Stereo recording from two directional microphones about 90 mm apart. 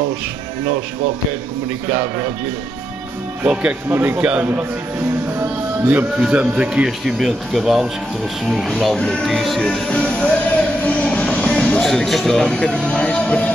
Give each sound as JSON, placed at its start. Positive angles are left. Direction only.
{"t": 3.9, "sound": "speech", "side_deg": -25}
{"t": 4.2, "sound": "speech", "side_deg": -15}
{"t": 5.9, "sound": "speech", "side_deg": -20}